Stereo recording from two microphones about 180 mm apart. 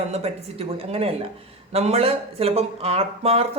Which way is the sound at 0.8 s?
35° right (ahead or behind).